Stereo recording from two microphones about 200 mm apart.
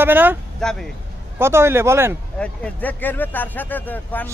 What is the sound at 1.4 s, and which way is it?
Speech, 10° right (ahead or behind).